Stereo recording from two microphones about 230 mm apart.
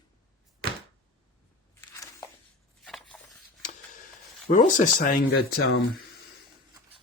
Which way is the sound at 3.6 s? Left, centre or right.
Left.